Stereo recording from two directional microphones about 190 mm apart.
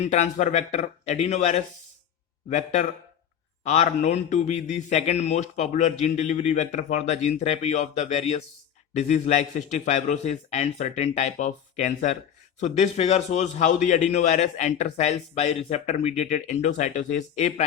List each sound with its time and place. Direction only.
0.0 s a man's voice: 35° left (ahead or behind)
3.6 s a man's voice: 35° left (ahead or behind)